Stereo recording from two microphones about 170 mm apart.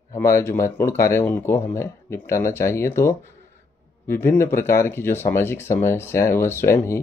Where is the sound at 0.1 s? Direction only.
15° left (ahead or behind).